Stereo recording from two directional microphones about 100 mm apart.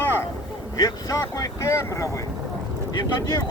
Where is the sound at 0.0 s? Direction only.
20° left (ahead or behind).